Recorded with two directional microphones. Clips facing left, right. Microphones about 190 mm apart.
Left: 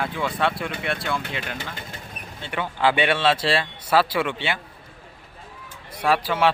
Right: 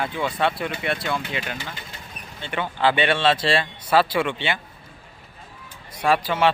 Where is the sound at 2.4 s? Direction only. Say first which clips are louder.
Even; 5° left (ahead or behind).